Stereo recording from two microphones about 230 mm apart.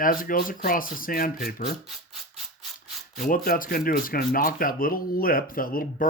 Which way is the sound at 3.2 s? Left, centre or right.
Left.